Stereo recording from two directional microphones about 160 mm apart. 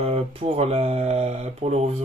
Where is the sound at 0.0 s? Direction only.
40° right (ahead or behind).